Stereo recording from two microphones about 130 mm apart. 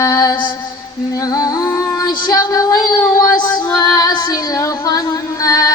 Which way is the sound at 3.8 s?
30° left (ahead or behind).